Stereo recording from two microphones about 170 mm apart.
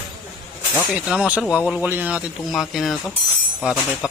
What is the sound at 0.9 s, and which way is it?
Speech, 5° right (ahead or behind).